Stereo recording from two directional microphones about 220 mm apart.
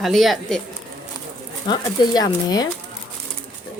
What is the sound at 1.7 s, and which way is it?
Speech, 20° left (ahead or behind).